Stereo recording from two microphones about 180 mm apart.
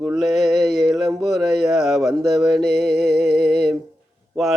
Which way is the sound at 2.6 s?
60° right (ahead or behind).